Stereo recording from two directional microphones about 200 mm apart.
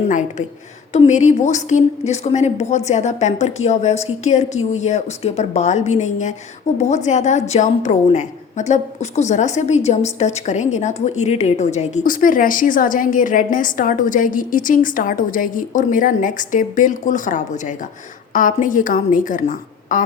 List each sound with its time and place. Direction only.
0.1 s a woman's voice: 35° left (ahead or behind)